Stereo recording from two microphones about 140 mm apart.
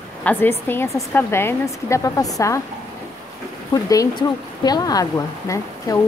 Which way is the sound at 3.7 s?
25° left (ahead or behind).